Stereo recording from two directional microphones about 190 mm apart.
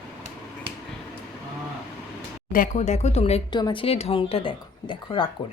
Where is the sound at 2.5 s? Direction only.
45° left (ahead or behind); by 5.2 s 25° left (ahead or behind).